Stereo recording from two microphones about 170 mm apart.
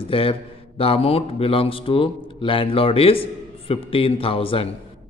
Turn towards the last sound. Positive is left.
turn(degrees=30)  # may be behind; listen again after turning